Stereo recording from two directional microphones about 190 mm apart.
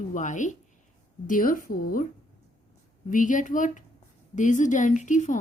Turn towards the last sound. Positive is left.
turn(degrees=40)  # may be behind; listen again after turning